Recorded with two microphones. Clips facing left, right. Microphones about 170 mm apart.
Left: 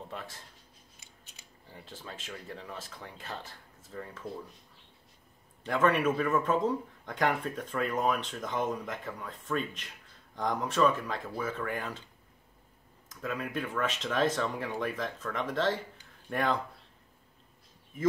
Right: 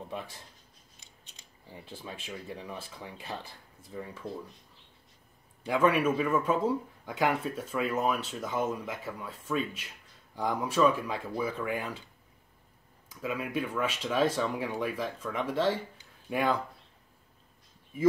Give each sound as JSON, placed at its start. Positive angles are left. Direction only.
{"t": 0.1, "sound": "speech", "side_deg": -15}
{"t": 0.9, "sound": "scissors", "side_deg": 5}
{"t": 1.7, "sound": "speech", "side_deg": -15}
{"t": 5.6, "sound": "speech", "side_deg": -10}
{"t": 13.1, "sound": "speech", "side_deg": -10}